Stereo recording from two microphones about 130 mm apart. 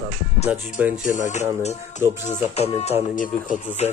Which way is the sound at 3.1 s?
85° left.